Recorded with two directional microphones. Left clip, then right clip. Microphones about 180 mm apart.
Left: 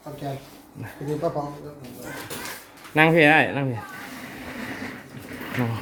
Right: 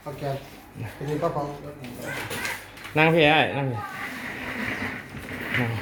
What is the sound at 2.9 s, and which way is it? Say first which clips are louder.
Speech: left 2 dB; 25° left (ahead or behind).